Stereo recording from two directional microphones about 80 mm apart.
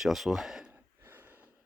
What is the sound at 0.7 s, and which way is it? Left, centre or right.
Gasp, right.